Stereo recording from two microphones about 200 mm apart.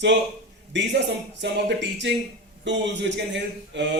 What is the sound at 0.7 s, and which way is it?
Speech, 60° right (ahead or behind).